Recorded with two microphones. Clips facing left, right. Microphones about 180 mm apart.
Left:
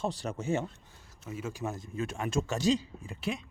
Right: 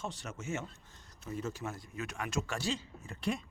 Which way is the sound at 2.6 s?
15° left (ahead or behind).